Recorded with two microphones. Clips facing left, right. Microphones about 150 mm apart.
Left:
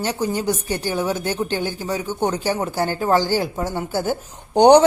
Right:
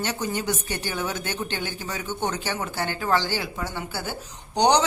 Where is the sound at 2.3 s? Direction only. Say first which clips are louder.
Left 7 dB; 35° left (ahead or behind).